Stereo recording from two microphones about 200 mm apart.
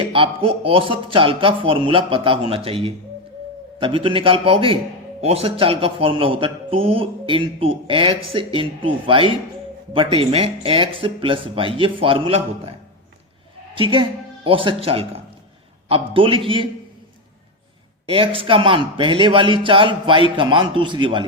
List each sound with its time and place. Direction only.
0.0 s speech: 25° right (ahead or behind)
13.7 s speech: 25° right (ahead or behind)
18.0 s speech: 25° right (ahead or behind)